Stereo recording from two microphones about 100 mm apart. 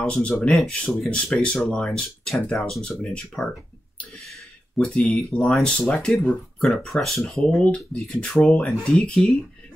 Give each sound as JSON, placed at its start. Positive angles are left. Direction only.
{"t": 0.0, "sound": "speech", "side_deg": 10}
{"t": 4.1, "sound": "a sound", "side_deg": 0}
{"t": 4.8, "sound": "speech", "side_deg": 5}